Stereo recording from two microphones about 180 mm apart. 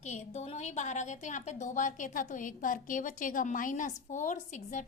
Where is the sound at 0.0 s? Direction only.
40° left (ahead or behind).